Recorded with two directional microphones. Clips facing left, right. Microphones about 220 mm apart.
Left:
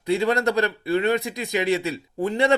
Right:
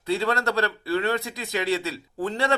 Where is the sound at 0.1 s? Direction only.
15° left (ahead or behind).